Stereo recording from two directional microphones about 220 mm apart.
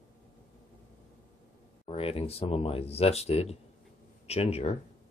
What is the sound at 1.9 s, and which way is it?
Speech, 25° left (ahead or behind).